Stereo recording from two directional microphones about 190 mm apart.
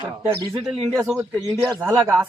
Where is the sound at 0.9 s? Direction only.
Centre (ahead or behind).